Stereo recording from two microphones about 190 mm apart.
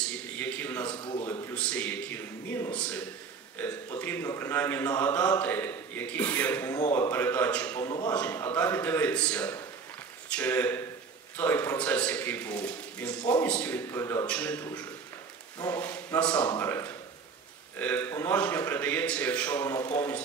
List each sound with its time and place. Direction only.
0.4 s a sound: 10° left (ahead or behind)
0.8 s a man's voice: 25° left (ahead or behind)
1.5 s speech: 5° left (ahead or behind)
15.6 s speech: 10° left (ahead or behind)